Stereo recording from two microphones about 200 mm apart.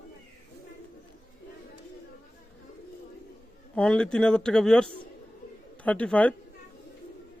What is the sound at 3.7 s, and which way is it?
Speech, 5° left (ahead or behind).